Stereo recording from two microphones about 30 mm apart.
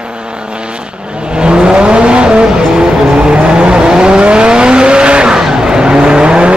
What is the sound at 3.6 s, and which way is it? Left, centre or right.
Vehicle, right.